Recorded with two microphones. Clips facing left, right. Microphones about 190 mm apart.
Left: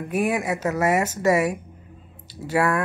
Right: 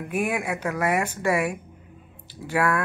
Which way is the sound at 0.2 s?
5° left (ahead or behind).